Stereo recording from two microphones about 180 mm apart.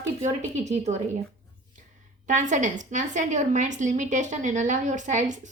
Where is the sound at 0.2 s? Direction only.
40° right (ahead or behind).